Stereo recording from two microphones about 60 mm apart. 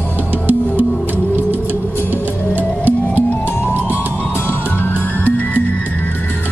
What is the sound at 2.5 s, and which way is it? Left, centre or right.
Music, right.